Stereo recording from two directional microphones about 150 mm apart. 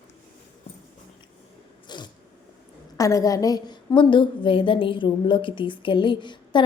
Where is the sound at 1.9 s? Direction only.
30° left (ahead or behind).